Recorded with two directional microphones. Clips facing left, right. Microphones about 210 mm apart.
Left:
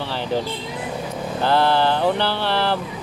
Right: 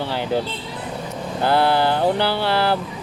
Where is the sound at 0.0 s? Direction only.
15° right (ahead or behind).